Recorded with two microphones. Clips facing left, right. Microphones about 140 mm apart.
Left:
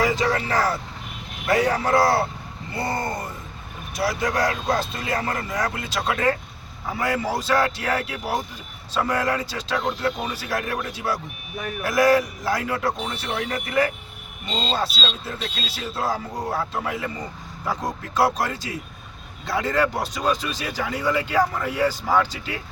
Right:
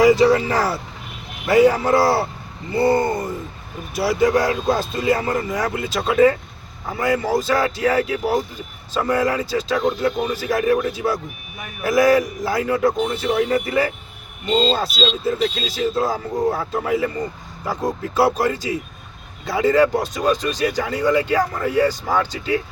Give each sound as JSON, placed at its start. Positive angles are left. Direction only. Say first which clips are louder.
{"t": 0.0, "sound": "speech", "louder": "right 9 dB", "side_deg": -10}
{"t": 14.4, "sound": "speech", "louder": "right 7 dB", "side_deg": 0}